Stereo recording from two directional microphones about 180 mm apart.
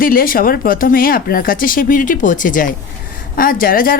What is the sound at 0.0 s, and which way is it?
Speech, 55° left (ahead or behind).